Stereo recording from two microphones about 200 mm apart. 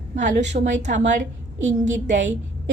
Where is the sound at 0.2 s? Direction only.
40° right (ahead or behind).